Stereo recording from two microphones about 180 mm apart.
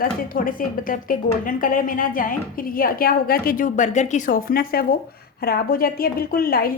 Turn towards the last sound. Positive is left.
turn(degrees=55)  # may be behind; listen again after turning